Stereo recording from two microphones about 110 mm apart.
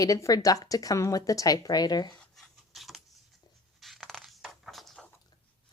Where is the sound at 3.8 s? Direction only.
Centre (ahead or behind).